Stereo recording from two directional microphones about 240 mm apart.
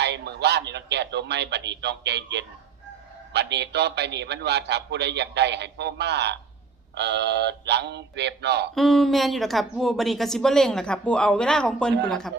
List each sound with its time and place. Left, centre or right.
0.0 s a man's voice: right
8.7 s a woman's voice: centre